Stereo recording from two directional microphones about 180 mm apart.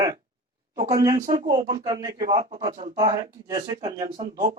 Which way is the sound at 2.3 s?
30° right (ahead or behind).